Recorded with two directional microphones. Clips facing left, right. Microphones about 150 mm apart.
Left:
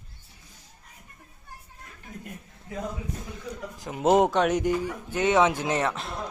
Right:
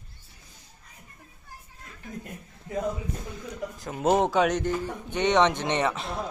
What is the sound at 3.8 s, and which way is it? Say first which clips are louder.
Speech: left 3 dB; 15° left (ahead or behind).